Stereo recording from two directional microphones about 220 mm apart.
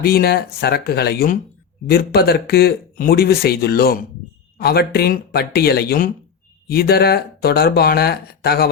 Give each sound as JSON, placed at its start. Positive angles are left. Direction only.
{"t": 0.0, "sound": "speech", "side_deg": 45}